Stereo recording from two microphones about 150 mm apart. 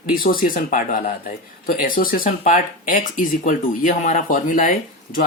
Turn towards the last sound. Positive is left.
turn(degrees=65)  # may be behind; listen again after turning